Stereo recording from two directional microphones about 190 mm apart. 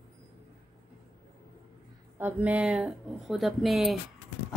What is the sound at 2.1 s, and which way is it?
Speech, 10° right (ahead or behind).